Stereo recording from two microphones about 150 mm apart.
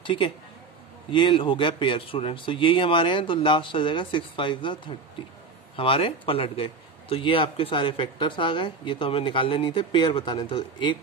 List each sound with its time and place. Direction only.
0.0 s a man's voice: 35° left (ahead or behind)